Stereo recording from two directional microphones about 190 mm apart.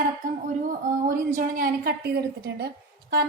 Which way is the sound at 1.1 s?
45° right (ahead or behind).